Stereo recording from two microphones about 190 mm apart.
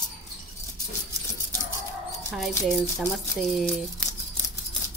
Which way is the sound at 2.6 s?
Centre (ahead or behind).